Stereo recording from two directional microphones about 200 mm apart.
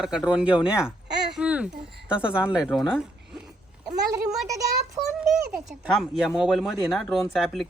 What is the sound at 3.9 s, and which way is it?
Speech, centre (ahead or behind).